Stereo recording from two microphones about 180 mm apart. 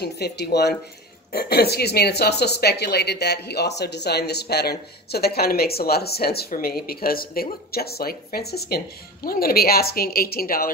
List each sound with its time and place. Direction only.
0.0 s speech: 65° left (ahead or behind)